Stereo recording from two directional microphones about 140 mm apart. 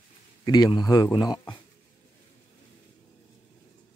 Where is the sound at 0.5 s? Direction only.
30° left (ahead or behind).